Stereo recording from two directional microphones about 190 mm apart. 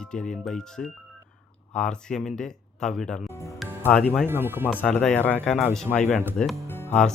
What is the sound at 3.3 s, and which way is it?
Speech, 15° left (ahead or behind).